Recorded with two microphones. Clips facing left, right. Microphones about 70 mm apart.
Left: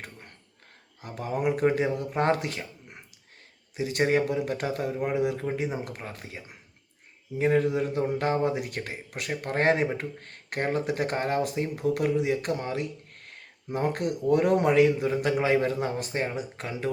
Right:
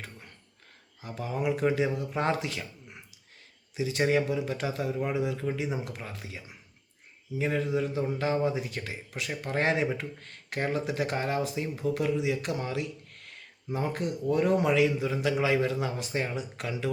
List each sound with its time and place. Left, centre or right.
1.0 s a man's voice: left
2.6 s a sound: left
3.8 s a man's voice: left
5.4 s a man's voice: left
13.7 s a man's voice: left